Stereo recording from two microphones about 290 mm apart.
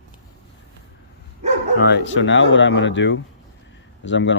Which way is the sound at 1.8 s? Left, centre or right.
Left.